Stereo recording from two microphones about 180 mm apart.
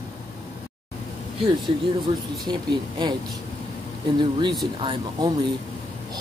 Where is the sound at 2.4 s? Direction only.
25° right (ahead or behind).